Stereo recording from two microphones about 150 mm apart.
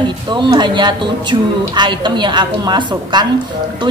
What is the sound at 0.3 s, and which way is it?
A woman's voice, 30° right (ahead or behind).